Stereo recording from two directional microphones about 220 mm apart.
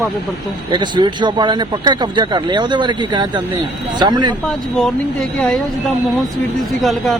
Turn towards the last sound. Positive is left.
turn(degrees=0)  # may be behind; listen again after turning